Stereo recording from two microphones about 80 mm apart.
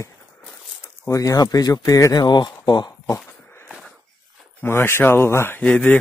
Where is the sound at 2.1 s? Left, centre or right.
Left.